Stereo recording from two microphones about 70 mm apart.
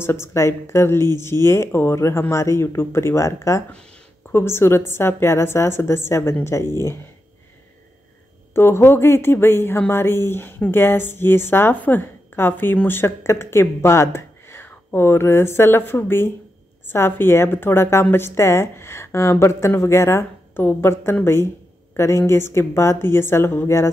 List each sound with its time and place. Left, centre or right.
0.0 s speech: left
8.5 s speech: left